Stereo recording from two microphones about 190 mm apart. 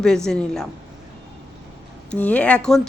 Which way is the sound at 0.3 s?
5° left (ahead or behind).